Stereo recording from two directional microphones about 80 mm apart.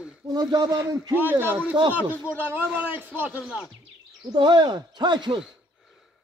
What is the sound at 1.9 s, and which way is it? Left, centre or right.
Speech, right.